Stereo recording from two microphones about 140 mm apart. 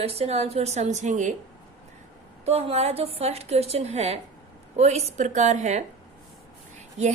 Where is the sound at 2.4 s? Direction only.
50° right (ahead or behind).